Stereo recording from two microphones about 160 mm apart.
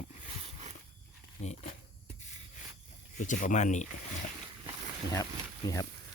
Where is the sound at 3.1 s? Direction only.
50° left (ahead or behind).